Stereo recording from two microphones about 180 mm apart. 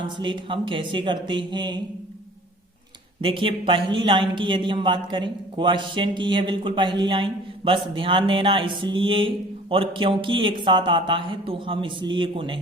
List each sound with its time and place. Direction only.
0.0 s a man's voice: 25° right (ahead or behind)
3.2 s a man's voice: 30° right (ahead or behind)